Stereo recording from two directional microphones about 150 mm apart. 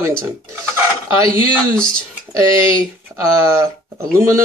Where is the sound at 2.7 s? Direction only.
20° right (ahead or behind).